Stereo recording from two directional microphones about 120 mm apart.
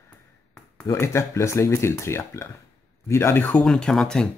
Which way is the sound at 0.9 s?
25° left (ahead or behind).